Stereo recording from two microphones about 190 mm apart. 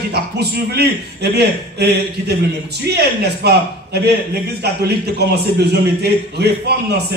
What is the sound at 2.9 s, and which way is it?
Speech, 60° right (ahead or behind).